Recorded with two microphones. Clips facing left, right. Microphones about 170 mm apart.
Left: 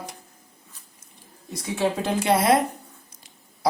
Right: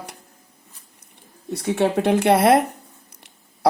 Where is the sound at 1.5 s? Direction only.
65° right (ahead or behind).